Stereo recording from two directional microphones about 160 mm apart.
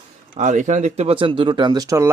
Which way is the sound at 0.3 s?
50° right (ahead or behind).